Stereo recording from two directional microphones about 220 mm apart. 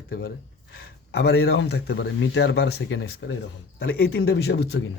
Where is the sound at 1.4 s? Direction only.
50° left (ahead or behind).